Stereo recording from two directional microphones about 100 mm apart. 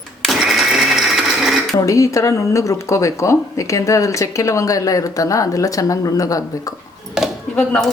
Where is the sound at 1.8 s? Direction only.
30° left (ahead or behind).